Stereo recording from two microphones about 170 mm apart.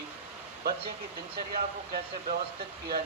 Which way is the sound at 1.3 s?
60° right (ahead or behind).